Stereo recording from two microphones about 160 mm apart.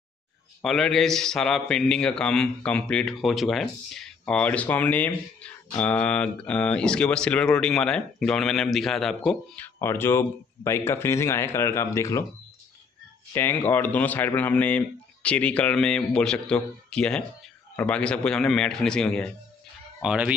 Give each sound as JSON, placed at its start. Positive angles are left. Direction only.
{"t": 0.6, "sound": "a man's voice", "side_deg": 5}
{"t": 9.8, "sound": "speech", "side_deg": 15}
{"t": 13.3, "sound": "a man's voice", "side_deg": 15}
{"t": 20.0, "sound": "speech", "side_deg": -5}